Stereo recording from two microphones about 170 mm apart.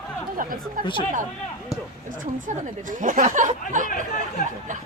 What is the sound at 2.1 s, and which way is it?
A woman's voice, 50° right (ahead or behind).